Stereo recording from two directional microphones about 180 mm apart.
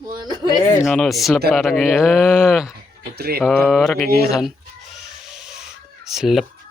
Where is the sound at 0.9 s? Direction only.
Centre (ahead or behind).